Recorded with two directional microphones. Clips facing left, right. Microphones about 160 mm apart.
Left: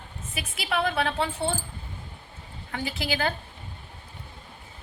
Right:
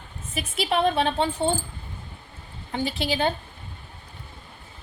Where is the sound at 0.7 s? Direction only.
30° right (ahead or behind).